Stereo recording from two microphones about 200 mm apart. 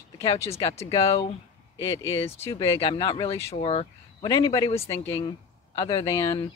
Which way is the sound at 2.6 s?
25° left (ahead or behind).